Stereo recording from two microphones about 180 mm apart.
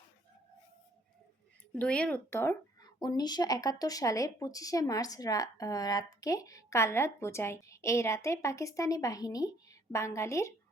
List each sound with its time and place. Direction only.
1.7 s speech: 5° left (ahead or behind)